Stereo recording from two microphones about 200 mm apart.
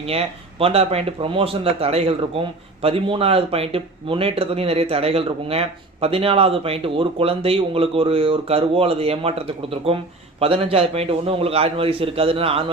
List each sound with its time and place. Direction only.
0.0 s speech: 30° right (ahead or behind)